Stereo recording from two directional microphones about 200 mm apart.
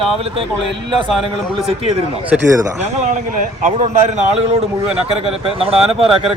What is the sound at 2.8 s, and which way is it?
A man's voice, 35° right (ahead or behind).